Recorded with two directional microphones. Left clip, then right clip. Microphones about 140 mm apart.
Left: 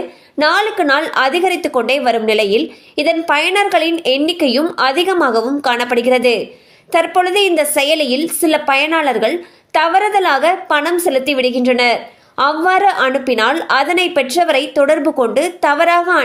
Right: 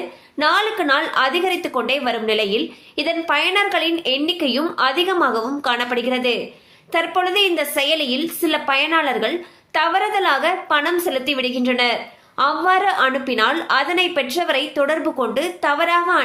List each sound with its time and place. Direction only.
0.3 s a woman's voice: 45° left (ahead or behind)